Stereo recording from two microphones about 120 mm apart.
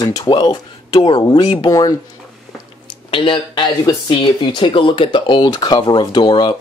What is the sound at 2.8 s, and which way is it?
Speech, 45° left (ahead or behind).